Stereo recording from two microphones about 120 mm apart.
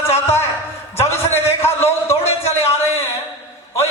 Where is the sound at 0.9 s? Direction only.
20° left (ahead or behind).